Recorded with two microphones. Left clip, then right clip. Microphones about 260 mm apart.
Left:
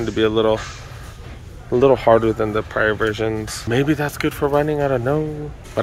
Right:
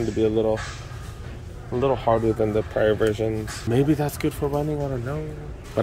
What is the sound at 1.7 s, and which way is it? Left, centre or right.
Speech, left.